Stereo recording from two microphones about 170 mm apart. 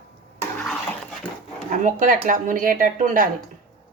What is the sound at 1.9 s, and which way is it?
Speech, 50° right (ahead or behind).